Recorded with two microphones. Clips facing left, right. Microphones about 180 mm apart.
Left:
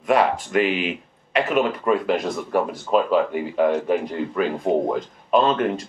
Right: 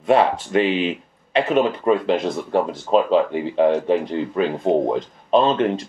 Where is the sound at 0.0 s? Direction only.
30° right (ahead or behind).